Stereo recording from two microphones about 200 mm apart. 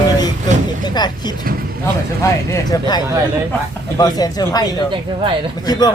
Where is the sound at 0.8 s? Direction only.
20° left (ahead or behind).